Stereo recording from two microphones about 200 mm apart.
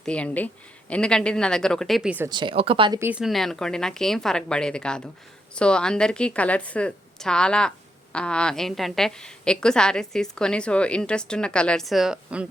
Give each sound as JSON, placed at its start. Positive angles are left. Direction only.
{"t": 0.0, "sound": "a woman's voice", "side_deg": 5}
{"t": 2.3, "sound": "speech", "side_deg": -25}
{"t": 3.0, "sound": "a woman's voice", "side_deg": -5}